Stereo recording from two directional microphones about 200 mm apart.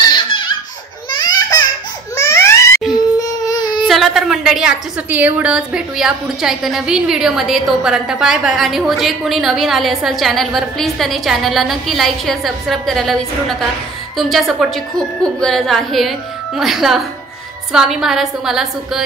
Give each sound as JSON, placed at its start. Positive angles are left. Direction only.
{"t": 0.0, "sound": "baby laughter", "side_deg": 25}
{"t": 1.1, "sound": "a sound", "side_deg": 20}
{"t": 3.2, "sound": "baby cry", "side_deg": 20}
{"t": 3.8, "sound": "a woman's voice", "side_deg": 0}